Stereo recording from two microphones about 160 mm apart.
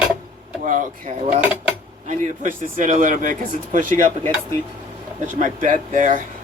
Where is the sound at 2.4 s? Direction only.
55° right (ahead or behind).